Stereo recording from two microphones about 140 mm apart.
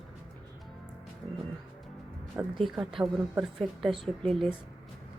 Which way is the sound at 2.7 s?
5° right (ahead or behind).